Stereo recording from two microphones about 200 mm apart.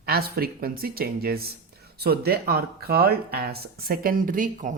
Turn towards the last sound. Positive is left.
turn(degrees=-40)  # may be behind; listen again after turning